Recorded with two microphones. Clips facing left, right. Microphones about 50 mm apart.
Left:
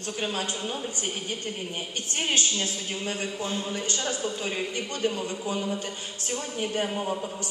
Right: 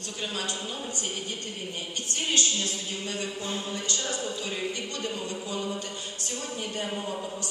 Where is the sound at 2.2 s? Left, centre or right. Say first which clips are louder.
Left 1 dB; left.